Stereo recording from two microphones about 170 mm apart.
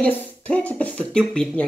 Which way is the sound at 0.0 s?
10° left (ahead or behind).